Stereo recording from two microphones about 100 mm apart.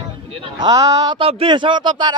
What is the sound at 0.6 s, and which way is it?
Speech, 40° right (ahead or behind).